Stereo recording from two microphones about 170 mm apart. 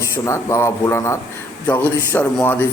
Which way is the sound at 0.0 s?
15° left (ahead or behind).